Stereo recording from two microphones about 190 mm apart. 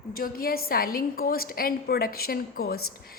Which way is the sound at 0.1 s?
50° left (ahead or behind).